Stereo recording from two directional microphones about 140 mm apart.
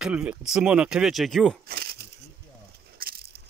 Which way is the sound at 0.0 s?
5° right (ahead or behind).